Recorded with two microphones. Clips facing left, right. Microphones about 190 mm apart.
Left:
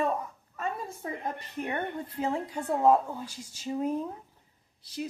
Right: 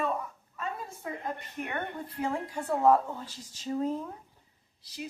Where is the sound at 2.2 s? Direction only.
20° left (ahead or behind).